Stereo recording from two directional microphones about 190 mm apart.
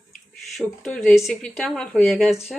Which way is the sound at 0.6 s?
Centre (ahead or behind).